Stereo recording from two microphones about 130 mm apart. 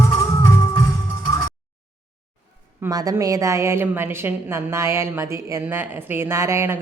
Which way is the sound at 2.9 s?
25° right (ahead or behind).